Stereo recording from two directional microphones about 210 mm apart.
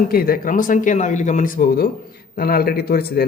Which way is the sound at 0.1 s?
45° left (ahead or behind).